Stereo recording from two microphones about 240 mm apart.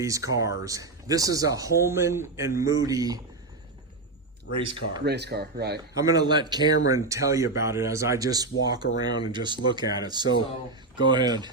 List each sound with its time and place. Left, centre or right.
0.0 s speech: centre
4.5 s speech: right
5.0 s speech: right
6.0 s speech: centre